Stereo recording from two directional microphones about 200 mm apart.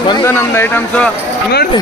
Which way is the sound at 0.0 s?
20° left (ahead or behind).